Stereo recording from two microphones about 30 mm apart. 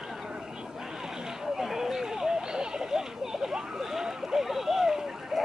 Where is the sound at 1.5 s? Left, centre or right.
Centre.